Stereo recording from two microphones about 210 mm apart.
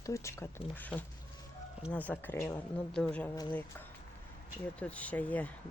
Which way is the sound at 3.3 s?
20° left (ahead or behind).